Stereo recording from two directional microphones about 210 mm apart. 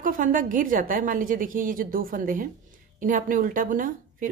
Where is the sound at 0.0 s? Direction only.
40° right (ahead or behind).